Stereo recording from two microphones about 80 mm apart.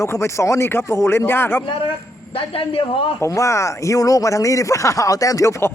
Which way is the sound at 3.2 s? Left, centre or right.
Left.